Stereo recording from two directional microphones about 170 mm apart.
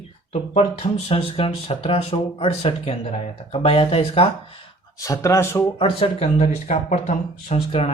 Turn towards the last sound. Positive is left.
turn(degrees=35)  # may be behind; listen again after turning